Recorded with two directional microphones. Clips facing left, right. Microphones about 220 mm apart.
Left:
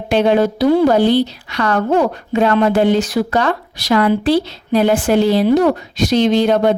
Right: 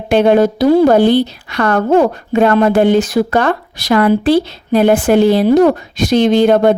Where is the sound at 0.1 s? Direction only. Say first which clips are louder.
Right 4 dB; 50° right (ahead or behind).